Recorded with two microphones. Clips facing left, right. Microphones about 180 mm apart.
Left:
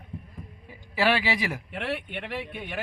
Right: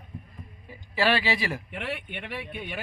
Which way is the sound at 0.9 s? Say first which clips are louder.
Even; 15° left (ahead or behind).